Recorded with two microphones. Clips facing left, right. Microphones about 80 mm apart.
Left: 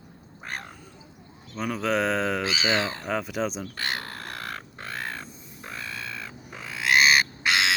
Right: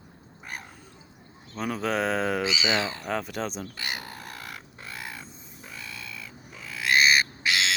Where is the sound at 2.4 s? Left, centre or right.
Left.